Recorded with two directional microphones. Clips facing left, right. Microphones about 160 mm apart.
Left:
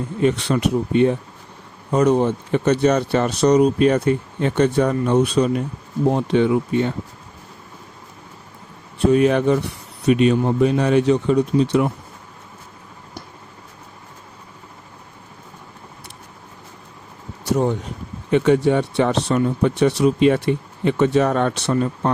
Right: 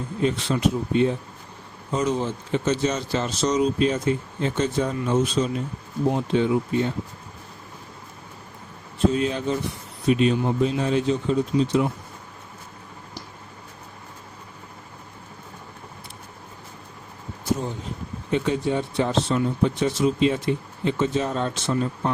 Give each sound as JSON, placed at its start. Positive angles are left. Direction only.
{"t": 0.2, "sound": "speech", "side_deg": 70}
{"t": 9.0, "sound": "speech", "side_deg": 70}
{"t": 17.4, "sound": "a sound", "side_deg": 65}
{"t": 18.3, "sound": "speech", "side_deg": 65}